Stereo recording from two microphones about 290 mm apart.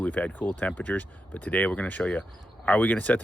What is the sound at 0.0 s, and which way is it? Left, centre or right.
Speech, centre.